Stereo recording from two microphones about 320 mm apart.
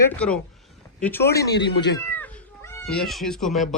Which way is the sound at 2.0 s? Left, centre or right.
Centre.